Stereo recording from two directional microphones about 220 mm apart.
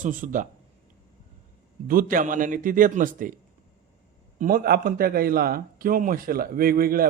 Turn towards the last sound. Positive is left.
turn(degrees=-40)  # may be behind; listen again after turning